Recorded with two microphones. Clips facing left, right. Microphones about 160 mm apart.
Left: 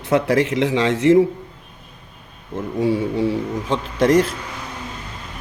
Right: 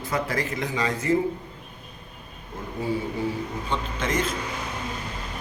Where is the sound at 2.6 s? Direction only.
90° left.